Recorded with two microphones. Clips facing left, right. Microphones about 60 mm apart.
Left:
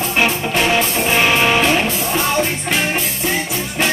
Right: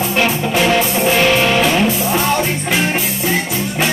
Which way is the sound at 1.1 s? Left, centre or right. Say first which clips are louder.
Even; centre.